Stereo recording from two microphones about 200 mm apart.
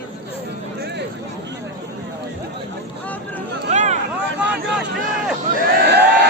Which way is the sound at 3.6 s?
35° right (ahead or behind).